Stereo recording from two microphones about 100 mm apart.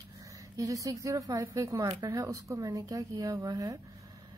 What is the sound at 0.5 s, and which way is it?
Speech, 35° right (ahead or behind).